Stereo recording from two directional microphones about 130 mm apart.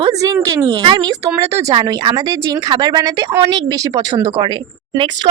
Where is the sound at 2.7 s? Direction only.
30° right (ahead or behind).